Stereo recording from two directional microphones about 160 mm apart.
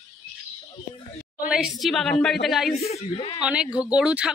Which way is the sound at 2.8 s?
35° left (ahead or behind).